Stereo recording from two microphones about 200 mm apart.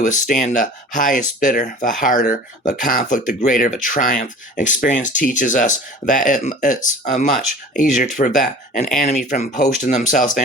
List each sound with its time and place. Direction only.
0.0 s speech: 40° left (ahead or behind)